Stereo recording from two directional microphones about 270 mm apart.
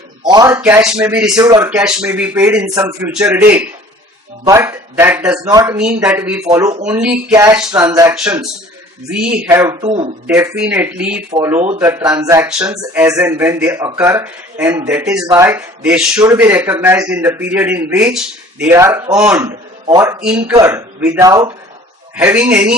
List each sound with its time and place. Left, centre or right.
0.3 s speech: centre
10.2 s speech: centre